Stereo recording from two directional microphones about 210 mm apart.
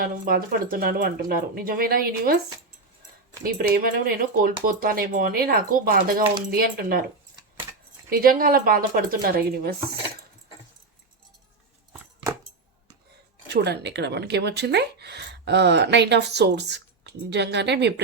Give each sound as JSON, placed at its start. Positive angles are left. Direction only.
{"t": 0.0, "sound": "a woman's voice", "side_deg": -45}
{"t": 3.4, "sound": "a woman's voice", "side_deg": -45}
{"t": 8.1, "sound": "a woman's voice", "side_deg": -45}
{"t": 13.5, "sound": "a woman's voice", "side_deg": -55}